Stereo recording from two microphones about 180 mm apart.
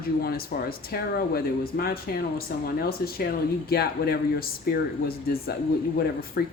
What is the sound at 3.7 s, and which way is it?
Speech, 60° left (ahead or behind).